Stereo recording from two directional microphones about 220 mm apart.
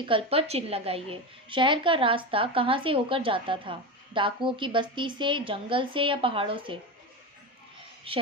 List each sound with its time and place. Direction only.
0.0 s a woman's voice: 25° right (ahead or behind)
8.1 s a woman's voice: 25° right (ahead or behind)